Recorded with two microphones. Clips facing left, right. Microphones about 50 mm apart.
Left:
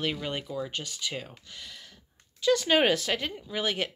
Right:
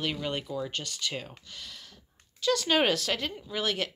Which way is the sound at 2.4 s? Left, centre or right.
Left.